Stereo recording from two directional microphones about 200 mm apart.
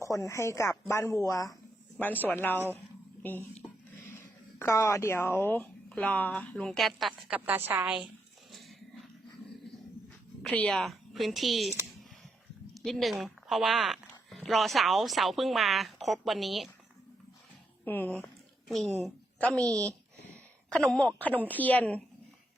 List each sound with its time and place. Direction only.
0.0 s speech: 15° left (ahead or behind)
4.6 s speech: 15° left (ahead or behind); by 8.1 s 5° right (ahead or behind)
10.4 s speech: 5° left (ahead or behind)
12.7 s speech: centre (ahead or behind)
17.8 s a woman's voice: 10° left (ahead or behind)
19.7 s speech: 15° right (ahead or behind)
20.7 s speech: 5° left (ahead or behind)